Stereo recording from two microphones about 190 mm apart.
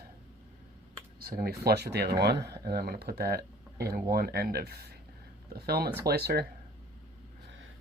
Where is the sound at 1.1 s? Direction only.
50° right (ahead or behind).